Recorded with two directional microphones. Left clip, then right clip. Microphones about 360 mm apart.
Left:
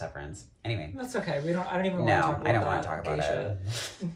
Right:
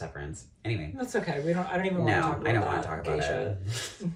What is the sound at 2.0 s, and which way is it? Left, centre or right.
Speech, centre.